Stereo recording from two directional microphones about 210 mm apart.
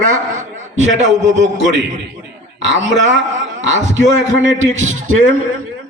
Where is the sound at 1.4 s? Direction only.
60° right (ahead or behind).